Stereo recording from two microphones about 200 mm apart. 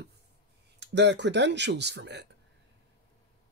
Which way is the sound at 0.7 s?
60° right (ahead or behind).